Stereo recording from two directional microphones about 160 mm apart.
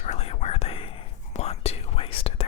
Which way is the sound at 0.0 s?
40° left (ahead or behind).